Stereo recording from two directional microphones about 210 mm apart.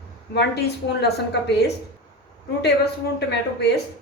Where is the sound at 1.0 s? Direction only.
50° left (ahead or behind).